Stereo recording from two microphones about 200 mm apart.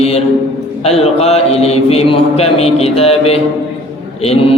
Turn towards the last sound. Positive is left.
turn(degrees=30)  # may be behind; listen again after turning